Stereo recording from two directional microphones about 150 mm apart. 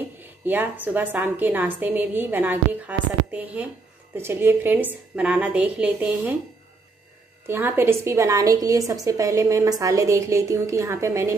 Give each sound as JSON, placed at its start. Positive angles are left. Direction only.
{"t": 0.5, "sound": "a woman's voice", "side_deg": -15}
{"t": 7.4, "sound": "a woman's voice", "side_deg": -15}